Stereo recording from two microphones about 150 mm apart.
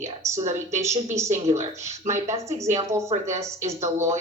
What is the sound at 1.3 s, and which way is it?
Speech, 50° right (ahead or behind).